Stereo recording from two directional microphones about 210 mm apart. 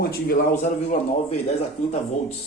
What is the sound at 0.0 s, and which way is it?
Speech, 45° left (ahead or behind).